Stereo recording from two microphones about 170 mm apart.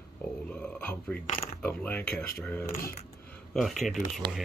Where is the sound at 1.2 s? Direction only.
45° left (ahead or behind).